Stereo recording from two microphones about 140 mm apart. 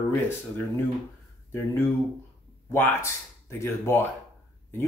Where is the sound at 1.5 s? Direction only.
20° left (ahead or behind).